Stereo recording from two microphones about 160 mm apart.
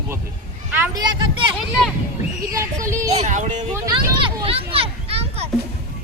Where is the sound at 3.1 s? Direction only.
50° right (ahead or behind).